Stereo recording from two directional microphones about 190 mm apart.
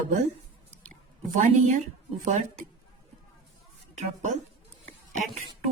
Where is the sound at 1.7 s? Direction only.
40° right (ahead or behind).